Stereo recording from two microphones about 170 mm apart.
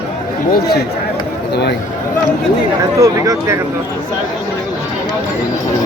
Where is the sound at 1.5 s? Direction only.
75° left (ahead or behind).